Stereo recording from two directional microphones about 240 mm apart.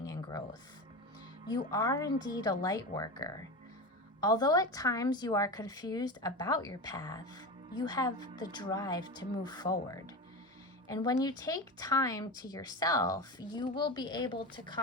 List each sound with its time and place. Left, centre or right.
0.0 s music: centre
1.5 s a woman's voice: centre